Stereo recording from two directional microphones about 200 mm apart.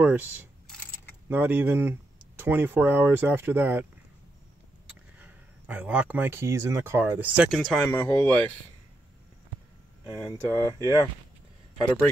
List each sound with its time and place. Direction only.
0.0 s speech: 10° right (ahead or behind)
0.7 s keys jangling: 5° left (ahead or behind)
1.3 s speech: 10° right (ahead or behind)
4.8 s speech: 5° right (ahead or behind); by 8.5 s 10° left (ahead or behind)
10.1 s speech: 5° right (ahead or behind)
10.5 s speech: 15° left (ahead or behind)